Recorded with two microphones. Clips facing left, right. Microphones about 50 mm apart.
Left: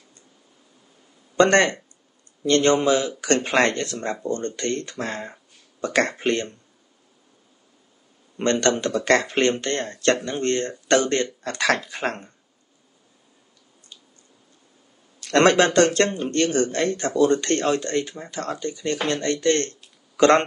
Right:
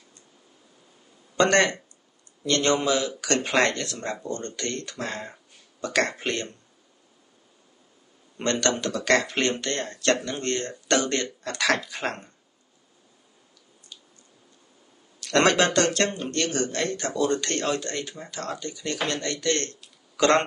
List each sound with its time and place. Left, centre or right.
1.3 s speech: left
8.5 s speech: left
15.1 s speech: left